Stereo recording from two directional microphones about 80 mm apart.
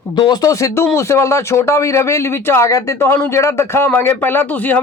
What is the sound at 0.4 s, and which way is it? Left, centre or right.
A man's voice, left.